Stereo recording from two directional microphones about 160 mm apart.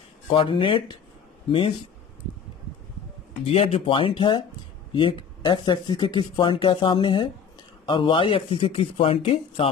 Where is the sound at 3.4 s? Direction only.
40° left (ahead or behind).